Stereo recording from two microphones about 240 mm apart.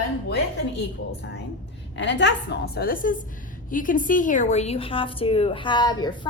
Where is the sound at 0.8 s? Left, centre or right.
Left.